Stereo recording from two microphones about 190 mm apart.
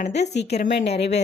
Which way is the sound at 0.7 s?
65° left (ahead or behind).